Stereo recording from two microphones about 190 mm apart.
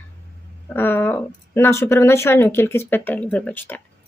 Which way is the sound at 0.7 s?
10° left (ahead or behind).